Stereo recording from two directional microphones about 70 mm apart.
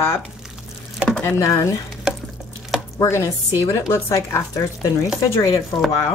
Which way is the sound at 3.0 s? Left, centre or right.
Left.